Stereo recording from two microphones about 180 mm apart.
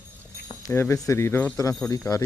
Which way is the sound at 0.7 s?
15° left (ahead or behind).